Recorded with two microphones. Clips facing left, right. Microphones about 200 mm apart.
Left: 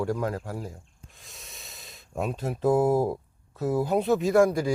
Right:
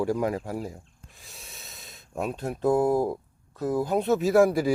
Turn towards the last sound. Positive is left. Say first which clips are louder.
# right 1 dB
turn(degrees=-5)  # may be behind; listen again after turning